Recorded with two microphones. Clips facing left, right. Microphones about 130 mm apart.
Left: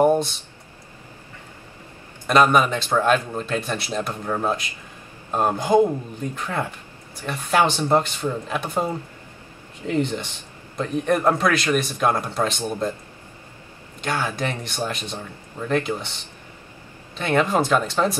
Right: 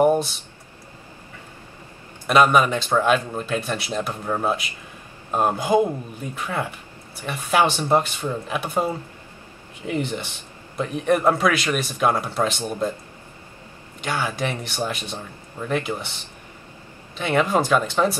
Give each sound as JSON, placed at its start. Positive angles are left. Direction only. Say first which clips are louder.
{"t": 0.0, "sound": "a sound", "louder": "even", "side_deg": -5}
{"t": 2.2, "sound": "a man's voice", "louder": "even", "side_deg": -5}
{"t": 14.0, "sound": "speech", "louder": "even", "side_deg": -10}
{"t": 17.2, "sound": "speech", "louder": "even", "side_deg": -5}